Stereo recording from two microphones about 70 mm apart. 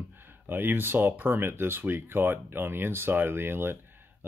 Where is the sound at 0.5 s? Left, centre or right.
Right.